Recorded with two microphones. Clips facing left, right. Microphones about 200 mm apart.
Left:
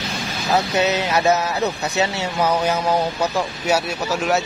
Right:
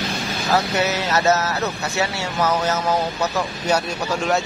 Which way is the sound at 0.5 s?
20° left (ahead or behind).